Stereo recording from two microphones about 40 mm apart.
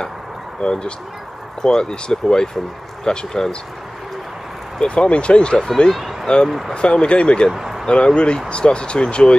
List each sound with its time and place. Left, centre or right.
0.6 s speech: left
4.7 s speech: left
5.9 s speech: centre
6.2 s speech: left
7.5 s a sound: centre
7.8 s speech: left